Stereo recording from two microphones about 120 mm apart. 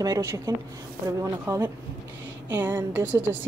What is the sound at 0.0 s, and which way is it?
Speech, 25° right (ahead or behind).